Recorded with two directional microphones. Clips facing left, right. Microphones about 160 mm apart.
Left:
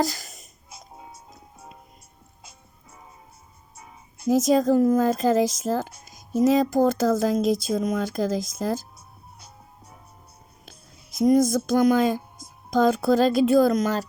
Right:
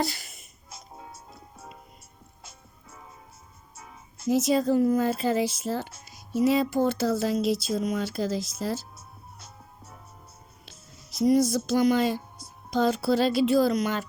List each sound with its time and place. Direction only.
0.0 s music: 40° left (ahead or behind)
4.3 s speech: 45° left (ahead or behind)
11.1 s speech: 50° left (ahead or behind)